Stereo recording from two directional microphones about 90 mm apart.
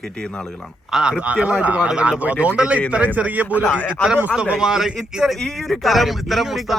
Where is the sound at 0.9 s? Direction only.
10° right (ahead or behind).